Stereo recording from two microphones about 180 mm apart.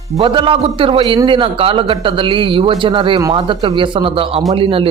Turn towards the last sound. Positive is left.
turn(degrees=-30)  # may be behind; listen again after turning